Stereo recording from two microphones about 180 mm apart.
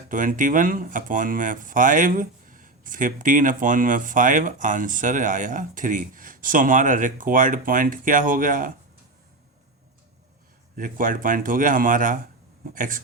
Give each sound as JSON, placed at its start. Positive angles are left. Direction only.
{"t": 0.1, "sound": "speech", "side_deg": -45}
{"t": 10.8, "sound": "speech", "side_deg": -50}